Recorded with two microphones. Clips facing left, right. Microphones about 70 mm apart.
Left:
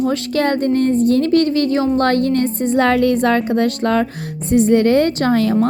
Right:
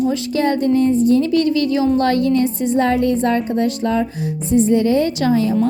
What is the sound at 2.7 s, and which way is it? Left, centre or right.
Music, left.